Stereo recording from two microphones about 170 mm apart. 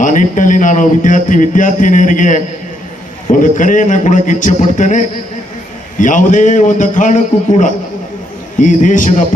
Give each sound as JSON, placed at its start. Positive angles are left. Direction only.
{"t": 0.0, "sound": "speech", "side_deg": 50}